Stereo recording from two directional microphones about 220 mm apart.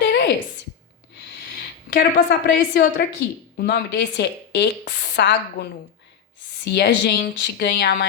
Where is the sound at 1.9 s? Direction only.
40° left (ahead or behind).